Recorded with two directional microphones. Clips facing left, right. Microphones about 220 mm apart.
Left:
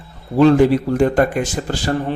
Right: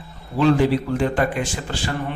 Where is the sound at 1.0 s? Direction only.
45° left (ahead or behind).